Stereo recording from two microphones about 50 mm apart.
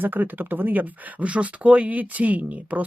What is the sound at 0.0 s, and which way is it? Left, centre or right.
Speech, right.